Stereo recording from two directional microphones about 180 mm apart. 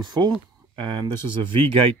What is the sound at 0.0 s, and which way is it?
Speech, 25° right (ahead or behind).